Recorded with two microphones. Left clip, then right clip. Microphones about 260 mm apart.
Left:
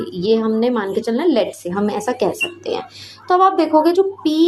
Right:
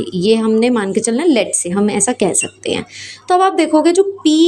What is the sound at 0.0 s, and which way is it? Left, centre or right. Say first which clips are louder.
Speech: right 3 dB; right.